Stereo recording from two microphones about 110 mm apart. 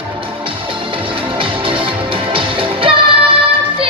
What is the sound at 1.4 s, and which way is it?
Music, 50° right (ahead or behind).